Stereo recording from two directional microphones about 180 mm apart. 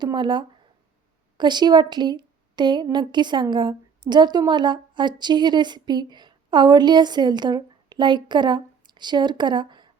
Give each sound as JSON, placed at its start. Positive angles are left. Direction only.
{"t": 0.0, "sound": "a woman's voice", "side_deg": -25}